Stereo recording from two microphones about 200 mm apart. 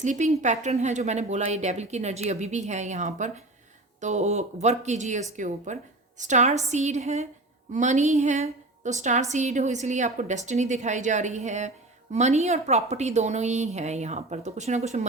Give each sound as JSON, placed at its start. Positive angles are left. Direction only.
{"t": 0.0, "sound": "a woman's voice", "side_deg": -35}